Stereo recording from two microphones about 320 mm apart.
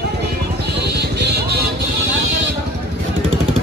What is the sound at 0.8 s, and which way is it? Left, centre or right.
Music, right.